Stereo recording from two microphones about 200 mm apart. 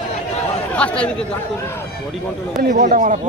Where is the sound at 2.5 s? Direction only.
40° right (ahead or behind).